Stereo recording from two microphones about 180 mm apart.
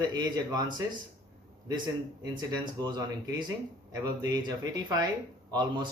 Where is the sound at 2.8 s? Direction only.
25° right (ahead or behind).